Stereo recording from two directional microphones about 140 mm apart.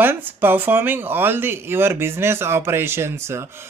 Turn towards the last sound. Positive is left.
turn(degrees=-20)  # may be behind; listen again after turning